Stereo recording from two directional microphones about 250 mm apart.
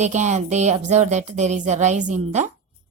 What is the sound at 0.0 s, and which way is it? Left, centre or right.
A woman's voice, right.